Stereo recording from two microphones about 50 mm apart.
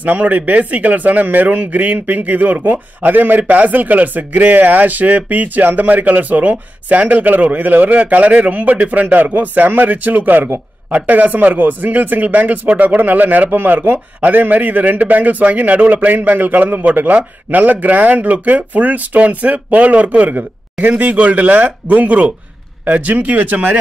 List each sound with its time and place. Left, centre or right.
0.0 s speech: right